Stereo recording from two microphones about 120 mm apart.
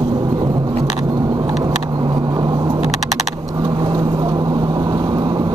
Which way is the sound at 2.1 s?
30° right (ahead or behind).